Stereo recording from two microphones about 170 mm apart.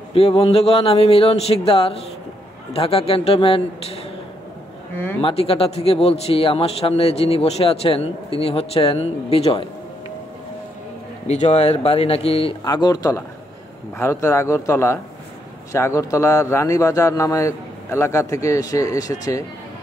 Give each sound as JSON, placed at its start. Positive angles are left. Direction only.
{"t": 0.1, "sound": "a man's voice", "side_deg": 35}
{"t": 4.9, "sound": "speech", "side_deg": 10}
{"t": 5.2, "sound": "a man's voice", "side_deg": 35}
{"t": 11.2, "sound": "a man's voice", "side_deg": 40}
{"t": 12.6, "sound": "a man's voice", "side_deg": 25}